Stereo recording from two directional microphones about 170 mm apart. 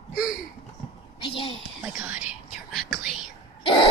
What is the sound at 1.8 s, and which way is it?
Whispering, 5° right (ahead or behind).